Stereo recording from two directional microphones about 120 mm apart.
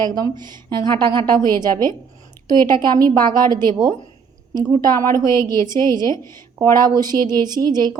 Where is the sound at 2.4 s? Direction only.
35° right (ahead or behind).